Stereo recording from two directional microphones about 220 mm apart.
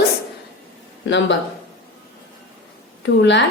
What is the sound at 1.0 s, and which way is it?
Speech, 55° left (ahead or behind).